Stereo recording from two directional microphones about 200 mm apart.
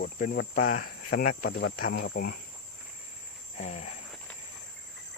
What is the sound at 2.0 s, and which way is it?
Speech, 45° left (ahead or behind).